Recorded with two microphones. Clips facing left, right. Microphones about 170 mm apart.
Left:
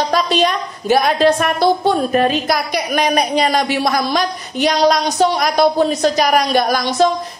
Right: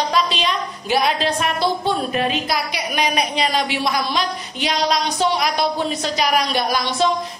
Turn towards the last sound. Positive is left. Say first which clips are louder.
# left 5 dB
turn(degrees=45)  # may be behind; listen again after turning